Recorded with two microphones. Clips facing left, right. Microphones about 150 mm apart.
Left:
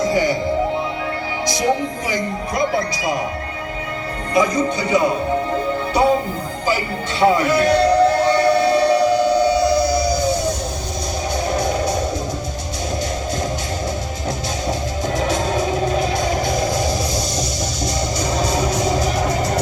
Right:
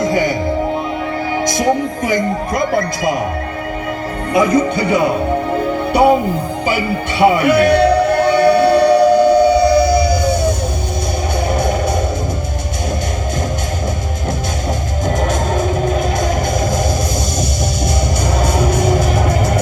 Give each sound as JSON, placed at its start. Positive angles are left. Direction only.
{"t": 0.0, "sound": "music", "side_deg": -55}
{"t": 2.0, "sound": "speech", "side_deg": -55}
{"t": 4.4, "sound": "speech", "side_deg": -55}
{"t": 6.7, "sound": "music", "side_deg": -60}
{"t": 11.5, "sound": "music", "side_deg": -55}
{"t": 15.0, "sound": "music", "side_deg": -50}
{"t": 18.3, "sound": "music", "side_deg": -55}